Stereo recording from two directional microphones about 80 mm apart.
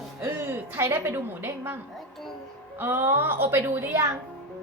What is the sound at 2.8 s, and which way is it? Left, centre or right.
Speech, right.